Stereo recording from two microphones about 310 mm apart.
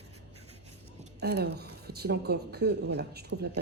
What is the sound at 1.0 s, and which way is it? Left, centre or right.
Speech, right.